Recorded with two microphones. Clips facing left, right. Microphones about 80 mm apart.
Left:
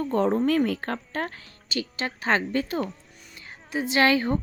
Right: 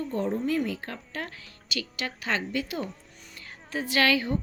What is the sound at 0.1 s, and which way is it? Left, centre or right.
Speech, left.